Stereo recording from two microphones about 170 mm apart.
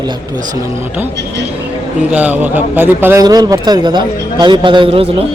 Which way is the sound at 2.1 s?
10° right (ahead or behind).